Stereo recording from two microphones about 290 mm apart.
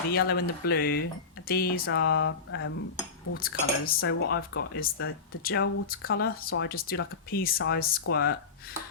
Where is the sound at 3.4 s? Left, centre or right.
Left.